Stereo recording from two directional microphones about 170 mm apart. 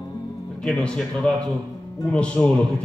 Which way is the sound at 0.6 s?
5° left (ahead or behind).